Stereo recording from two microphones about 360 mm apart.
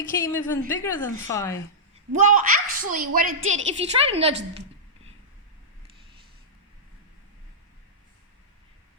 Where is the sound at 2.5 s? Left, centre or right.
Right.